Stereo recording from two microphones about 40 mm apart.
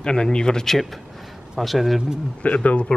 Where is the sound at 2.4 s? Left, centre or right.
Left.